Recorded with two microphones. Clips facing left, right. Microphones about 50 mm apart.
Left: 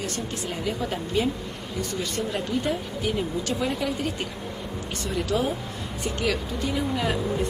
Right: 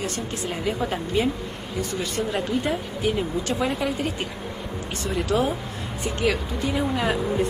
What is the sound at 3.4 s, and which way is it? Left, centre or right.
Speech, right.